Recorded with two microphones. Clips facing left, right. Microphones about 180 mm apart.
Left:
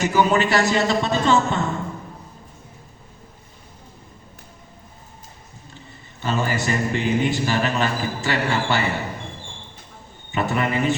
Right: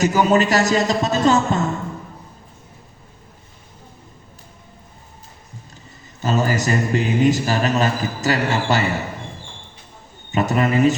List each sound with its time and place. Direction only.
0.0 s a man's voice: 40° right (ahead or behind)
6.2 s a man's voice: 40° right (ahead or behind)
10.3 s a man's voice: 40° right (ahead or behind)